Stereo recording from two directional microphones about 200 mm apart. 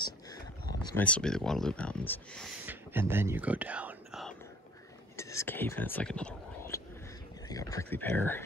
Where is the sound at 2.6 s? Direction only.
10° right (ahead or behind).